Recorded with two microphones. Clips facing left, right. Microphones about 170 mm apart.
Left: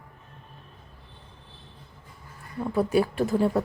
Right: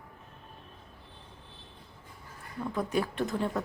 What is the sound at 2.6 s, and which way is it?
Speech, 35° left (ahead or behind).